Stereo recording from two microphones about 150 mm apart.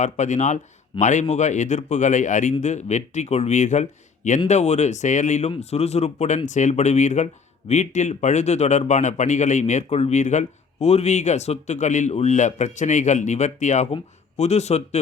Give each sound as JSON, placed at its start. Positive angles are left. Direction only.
{"t": 0.0, "sound": "speech", "side_deg": 55}